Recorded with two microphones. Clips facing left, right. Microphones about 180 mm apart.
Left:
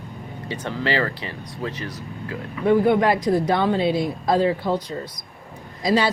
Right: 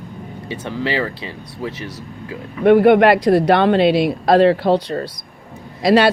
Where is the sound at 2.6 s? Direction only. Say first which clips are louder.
Right 7 dB; 70° right (ahead or behind).